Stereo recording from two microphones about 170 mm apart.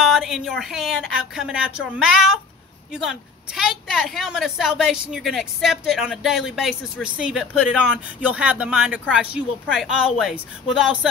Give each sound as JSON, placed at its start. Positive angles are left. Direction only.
{"t": 0.0, "sound": "a woman's voice", "side_deg": 0}